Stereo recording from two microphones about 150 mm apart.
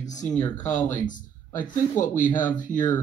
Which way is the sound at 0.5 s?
55° left (ahead or behind).